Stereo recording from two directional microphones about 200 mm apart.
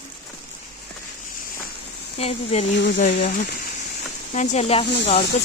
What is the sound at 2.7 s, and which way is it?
Speech, 60° left (ahead or behind).